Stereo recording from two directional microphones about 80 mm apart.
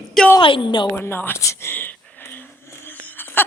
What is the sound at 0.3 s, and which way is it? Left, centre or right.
Speech, left.